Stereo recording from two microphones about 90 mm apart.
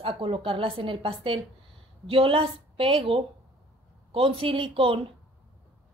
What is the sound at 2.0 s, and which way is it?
A woman's voice, 90° right.